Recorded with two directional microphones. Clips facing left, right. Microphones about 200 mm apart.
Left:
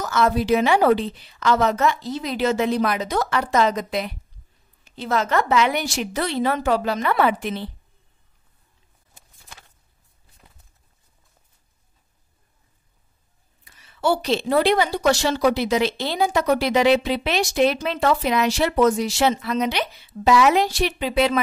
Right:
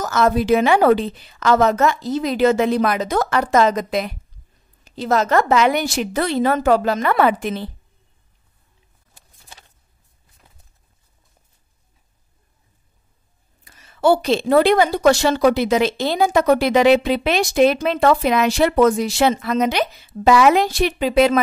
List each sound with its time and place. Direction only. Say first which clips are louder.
0.0 s a woman's voice: right 3 dB; 45° right (ahead or behind)
13.7 s a woman's voice: right 6 dB; 45° right (ahead or behind)